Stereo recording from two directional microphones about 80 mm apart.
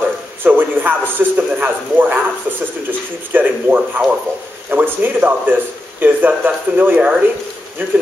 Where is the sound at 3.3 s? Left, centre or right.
Centre.